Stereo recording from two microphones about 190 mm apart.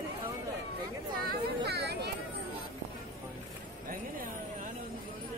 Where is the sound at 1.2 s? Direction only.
60° right (ahead or behind).